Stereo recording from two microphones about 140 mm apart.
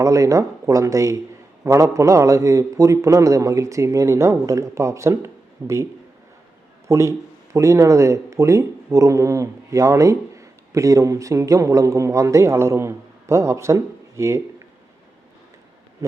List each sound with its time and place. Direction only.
0.0 s a man's voice: 25° right (ahead or behind)